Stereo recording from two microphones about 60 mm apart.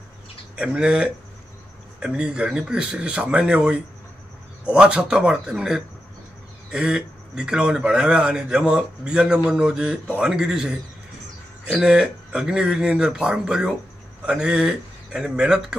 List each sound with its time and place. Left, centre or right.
0.7 s a man's voice: centre